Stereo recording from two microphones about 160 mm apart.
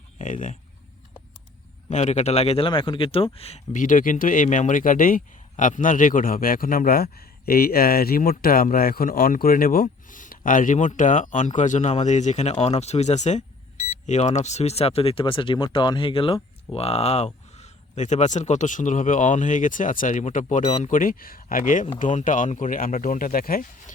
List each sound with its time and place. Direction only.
0.2 s speech: 50° left (ahead or behind)
1.9 s speech: 45° left (ahead or behind); by 23.9 s 60° left (ahead or behind)